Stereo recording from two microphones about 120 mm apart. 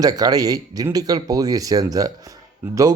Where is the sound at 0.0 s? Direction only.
30° right (ahead or behind).